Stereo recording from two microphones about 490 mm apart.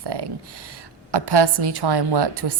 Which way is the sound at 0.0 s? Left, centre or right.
Right.